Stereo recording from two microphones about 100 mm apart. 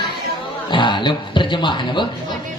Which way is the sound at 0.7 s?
55° left (ahead or behind).